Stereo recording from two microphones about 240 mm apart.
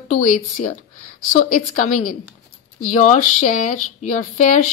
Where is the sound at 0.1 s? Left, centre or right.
Left.